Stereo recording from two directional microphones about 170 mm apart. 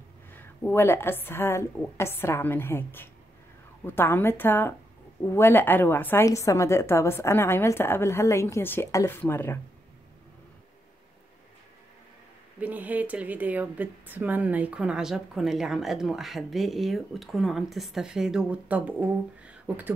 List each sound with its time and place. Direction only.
0.3 s a woman's voice: 10° left (ahead or behind)
12.5 s speech: 10° right (ahead or behind)